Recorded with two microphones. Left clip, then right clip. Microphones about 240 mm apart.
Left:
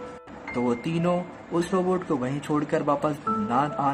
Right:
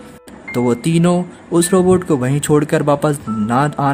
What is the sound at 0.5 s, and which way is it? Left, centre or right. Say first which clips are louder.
Speech: right 10 dB; right.